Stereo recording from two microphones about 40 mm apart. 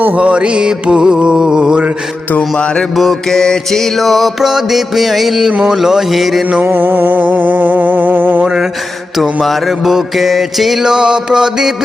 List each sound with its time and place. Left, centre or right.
0.2 s music: right
3.0 s mantra: centre
4.4 s mantra: centre
6.7 s a sound: right
9.4 s mantra: centre
10.8 s mantra: centre